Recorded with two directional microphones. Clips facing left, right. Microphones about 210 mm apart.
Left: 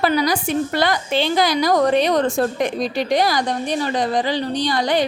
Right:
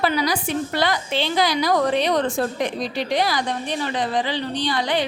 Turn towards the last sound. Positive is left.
turn(degrees=40)  # may be behind; listen again after turning